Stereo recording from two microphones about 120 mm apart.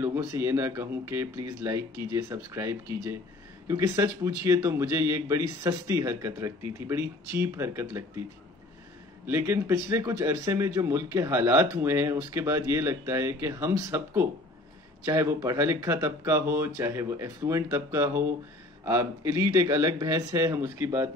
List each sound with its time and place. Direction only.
0.0 s speech: 20° right (ahead or behind)
9.2 s speech: 20° right (ahead or behind)